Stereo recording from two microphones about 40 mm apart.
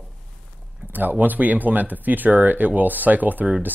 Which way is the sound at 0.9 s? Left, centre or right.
Right.